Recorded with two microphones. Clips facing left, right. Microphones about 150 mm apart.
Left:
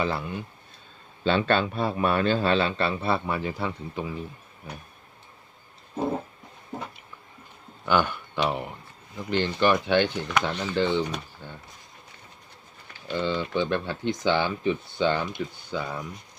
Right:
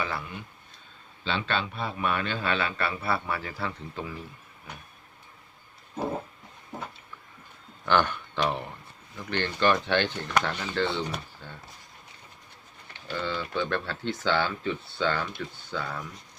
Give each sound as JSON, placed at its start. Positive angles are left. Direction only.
{"t": 0.0, "sound": "speech", "side_deg": 30}
{"t": 1.2, "sound": "a man's voice", "side_deg": 45}
{"t": 7.9, "sound": "speech", "side_deg": 10}
{"t": 13.1, "sound": "speech", "side_deg": 20}